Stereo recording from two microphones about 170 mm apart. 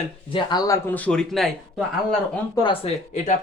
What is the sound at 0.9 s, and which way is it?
Speech, 10° left (ahead or behind).